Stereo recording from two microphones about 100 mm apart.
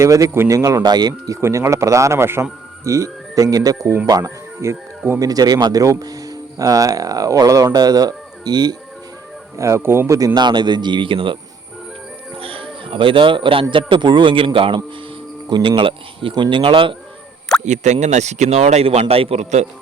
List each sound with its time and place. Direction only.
0.0 s speech: 30° right (ahead or behind)
1.4 s speech: 25° right (ahead or behind)
5.2 s speech: 40° right (ahead or behind)
9.6 s speech: 30° right (ahead or behind); by 11.3 s 60° right (ahead or behind)
12.4 s a sound: 70° right (ahead or behind)
12.8 s a man's voice: 60° right (ahead or behind)
17.5 s a sound: 5° left (ahead or behind)
18.5 s a man's voice: 90° right